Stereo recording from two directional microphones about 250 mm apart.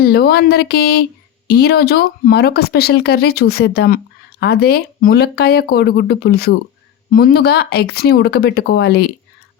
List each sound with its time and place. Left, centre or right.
0.0 s speech: left